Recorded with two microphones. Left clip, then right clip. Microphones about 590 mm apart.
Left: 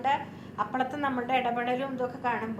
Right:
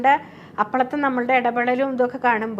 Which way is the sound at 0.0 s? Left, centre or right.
Right.